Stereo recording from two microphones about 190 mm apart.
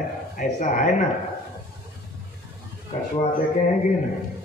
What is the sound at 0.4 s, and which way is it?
Speech, 45° left (ahead or behind).